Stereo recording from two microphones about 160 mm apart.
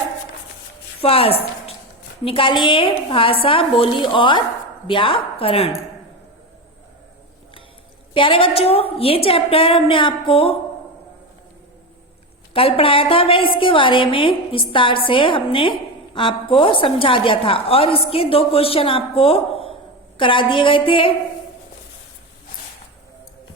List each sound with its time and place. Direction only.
1.0 s a woman's voice: 35° left (ahead or behind)
8.1 s a woman's voice: 35° left (ahead or behind)
12.5 s a woman's voice: 35° left (ahead or behind)